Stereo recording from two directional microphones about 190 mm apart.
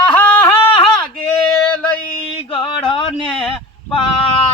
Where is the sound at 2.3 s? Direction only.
25° left (ahead or behind).